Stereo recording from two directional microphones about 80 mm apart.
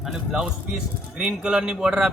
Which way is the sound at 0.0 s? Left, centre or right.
Centre.